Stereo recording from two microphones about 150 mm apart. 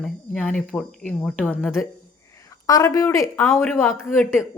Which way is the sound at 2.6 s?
25° left (ahead or behind).